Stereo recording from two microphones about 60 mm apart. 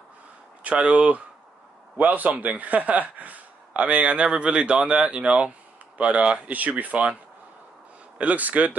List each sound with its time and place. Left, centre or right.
0.7 s a man's voice: right
8.2 s a man's voice: right